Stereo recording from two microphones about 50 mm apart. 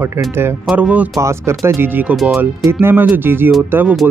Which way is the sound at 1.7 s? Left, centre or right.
Right.